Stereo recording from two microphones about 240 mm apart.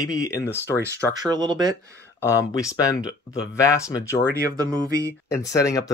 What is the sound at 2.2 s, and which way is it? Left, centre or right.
Speech, centre.